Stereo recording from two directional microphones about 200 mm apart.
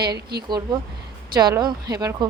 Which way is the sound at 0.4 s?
20° right (ahead or behind).